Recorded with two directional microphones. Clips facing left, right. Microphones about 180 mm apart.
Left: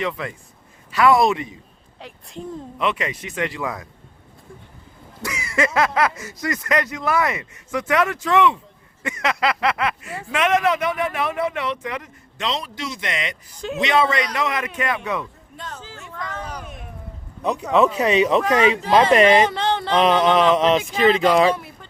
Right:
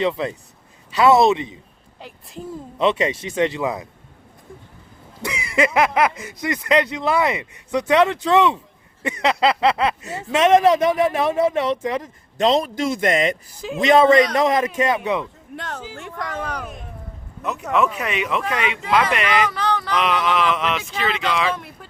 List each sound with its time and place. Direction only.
0.0 s speech: 25° right (ahead or behind)
2.0 s a woman's voice: centre (ahead or behind)
2.7 s speech: 30° right (ahead or behind)
5.2 s speech: 20° right (ahead or behind)
12.4 s a man's voice: 45° right (ahead or behind)
13.6 s a woman's voice: centre (ahead or behind)
13.8 s a man's voice: 45° right (ahead or behind); by 15.3 s 25° right (ahead or behind)
15.5 s speech: 70° right (ahead or behind)
17.7 s speech: 30° left (ahead or behind)